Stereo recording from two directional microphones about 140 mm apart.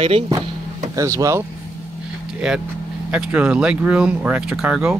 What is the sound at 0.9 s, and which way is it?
Speech, 25° right (ahead or behind).